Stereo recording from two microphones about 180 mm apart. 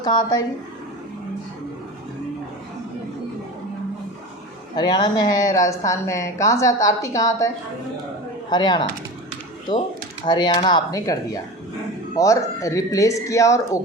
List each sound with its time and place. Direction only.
0.0 s speech: 20° left (ahead or behind)
4.7 s speech: 25° left (ahead or behind)